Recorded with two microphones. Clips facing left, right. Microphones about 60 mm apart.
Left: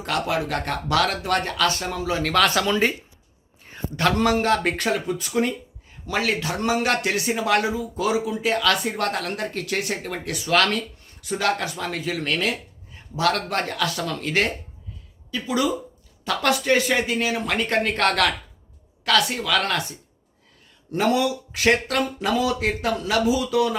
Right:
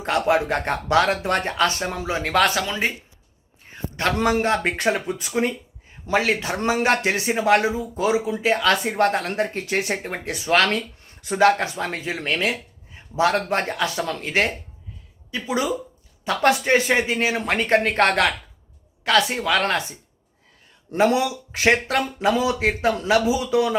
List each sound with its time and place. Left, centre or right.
0.0 s a man's voice: right; by 2.9 s centre
4.2 s a man's voice: right
20.9 s a man's voice: right